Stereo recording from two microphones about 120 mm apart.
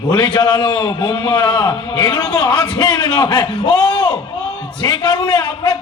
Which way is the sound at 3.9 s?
40° left (ahead or behind).